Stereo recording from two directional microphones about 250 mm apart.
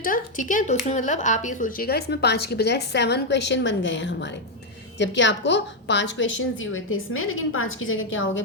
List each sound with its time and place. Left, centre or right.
0.0 s a woman's voice: left